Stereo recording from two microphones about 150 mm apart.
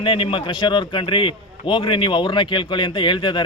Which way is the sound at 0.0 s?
35° left (ahead or behind).